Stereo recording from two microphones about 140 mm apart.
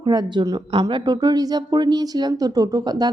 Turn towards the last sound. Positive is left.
turn(degrees=-30)  # may be behind; listen again after turning